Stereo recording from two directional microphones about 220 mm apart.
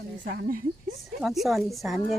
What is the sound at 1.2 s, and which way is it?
Speech, centre (ahead or behind).